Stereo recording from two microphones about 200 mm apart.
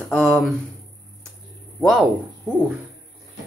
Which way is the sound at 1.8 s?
5° right (ahead or behind).